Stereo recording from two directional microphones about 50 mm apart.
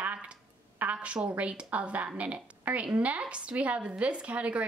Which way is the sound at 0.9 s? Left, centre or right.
Right.